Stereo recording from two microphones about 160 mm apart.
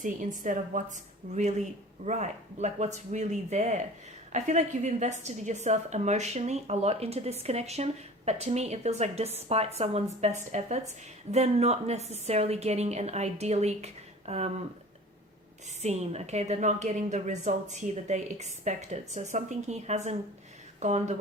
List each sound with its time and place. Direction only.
0.0 s a woman's voice: 55° right (ahead or behind)
15.8 s a woman's voice: 40° right (ahead or behind)